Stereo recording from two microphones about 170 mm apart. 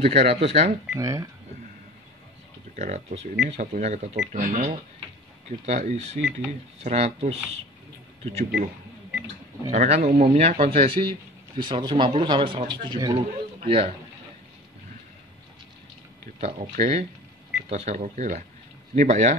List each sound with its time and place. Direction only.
0.0 s a man's voice: 40° right (ahead or behind)
0.9 s a man's voice: 20° right (ahead or behind)
2.7 s a man's voice: 45° right (ahead or behind)
9.7 s a man's voice: 40° right (ahead or behind)
10.6 s a man's voice: 35° right (ahead or behind)
16.3 s a man's voice: 40° right (ahead or behind)